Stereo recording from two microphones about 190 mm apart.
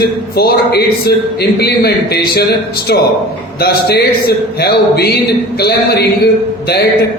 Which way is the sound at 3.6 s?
55° left (ahead or behind).